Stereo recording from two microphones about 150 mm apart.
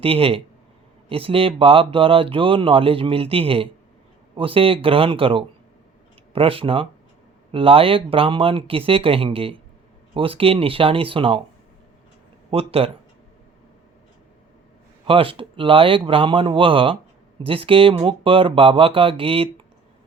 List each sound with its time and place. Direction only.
0.0 s speech: 40° right (ahead or behind)
12.5 s speech: 40° right (ahead or behind)
15.0 s speech: 35° right (ahead or behind)